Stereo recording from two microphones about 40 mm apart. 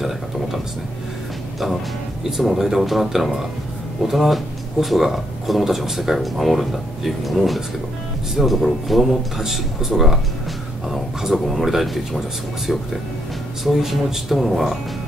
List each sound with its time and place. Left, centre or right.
2.2 s speech: centre
13.7 s speech: centre